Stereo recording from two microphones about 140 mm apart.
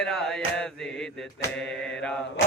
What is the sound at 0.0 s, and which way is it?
Music, 5° left (ahead or behind).